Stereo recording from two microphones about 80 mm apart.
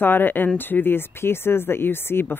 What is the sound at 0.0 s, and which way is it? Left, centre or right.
Speech, left.